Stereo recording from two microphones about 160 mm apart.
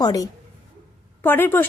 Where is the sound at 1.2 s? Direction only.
15° left (ahead or behind).